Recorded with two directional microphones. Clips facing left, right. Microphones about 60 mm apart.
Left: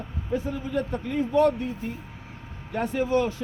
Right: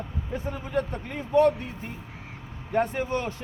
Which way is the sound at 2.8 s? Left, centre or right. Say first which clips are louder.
Left 2 dB; right.